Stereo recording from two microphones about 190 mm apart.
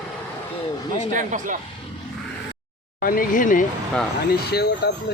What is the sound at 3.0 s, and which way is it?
Speech, 45° left (ahead or behind).